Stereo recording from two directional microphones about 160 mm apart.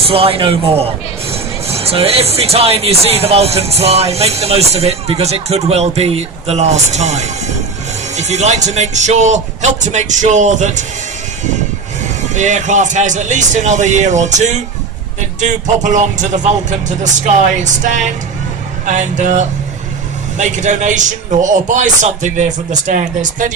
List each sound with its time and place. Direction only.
0.1 s a man's voice: 35° right (ahead or behind)
12.3 s a man's voice: 50° right (ahead or behind)